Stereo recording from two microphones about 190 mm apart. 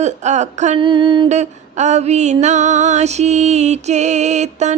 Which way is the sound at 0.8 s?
25° right (ahead or behind).